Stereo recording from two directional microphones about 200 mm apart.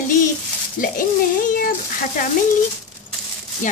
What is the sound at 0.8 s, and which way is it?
Speech, 40° left (ahead or behind).